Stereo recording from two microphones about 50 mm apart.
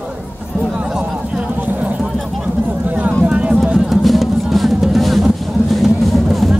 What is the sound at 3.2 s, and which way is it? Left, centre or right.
Run, right.